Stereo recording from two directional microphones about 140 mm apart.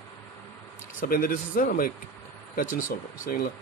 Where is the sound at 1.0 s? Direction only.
85° left.